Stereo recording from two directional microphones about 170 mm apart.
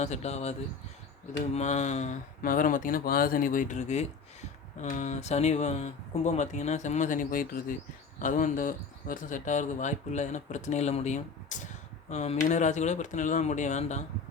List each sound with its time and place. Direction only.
0.0 s speech: 40° left (ahead or behind)
1.5 s speech: 40° left (ahead or behind)